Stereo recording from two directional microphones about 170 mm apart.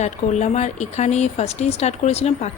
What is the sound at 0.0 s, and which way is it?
Speech, 40° left (ahead or behind).